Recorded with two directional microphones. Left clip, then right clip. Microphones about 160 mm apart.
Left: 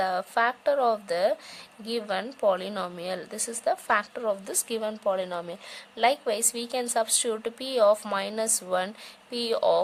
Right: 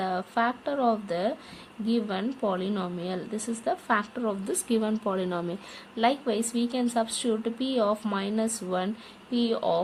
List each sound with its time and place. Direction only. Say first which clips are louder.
0.0 s a woman's voice: left 2 dB; 50° left (ahead or behind); by 5.5 s 30° left (ahead or behind)
6.0 s a woman's voice: left 1 dB; 40° left (ahead or behind)